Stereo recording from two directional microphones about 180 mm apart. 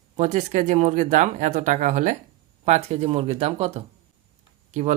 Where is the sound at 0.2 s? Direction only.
40° right (ahead or behind).